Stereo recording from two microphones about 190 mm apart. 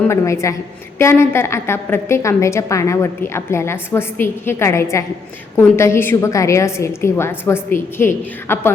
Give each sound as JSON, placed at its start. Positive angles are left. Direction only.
{"t": 0.1, "sound": "a woman's voice", "side_deg": 15}